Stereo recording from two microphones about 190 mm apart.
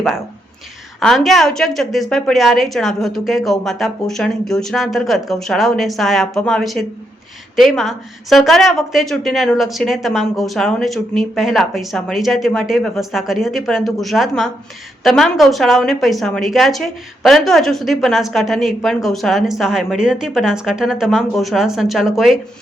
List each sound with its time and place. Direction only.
0.9 s a woman's voice: centre (ahead or behind)